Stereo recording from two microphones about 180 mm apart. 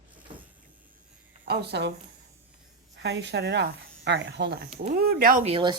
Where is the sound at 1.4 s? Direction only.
65° right (ahead or behind).